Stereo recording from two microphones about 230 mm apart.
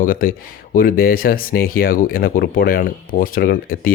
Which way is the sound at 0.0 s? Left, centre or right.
Left.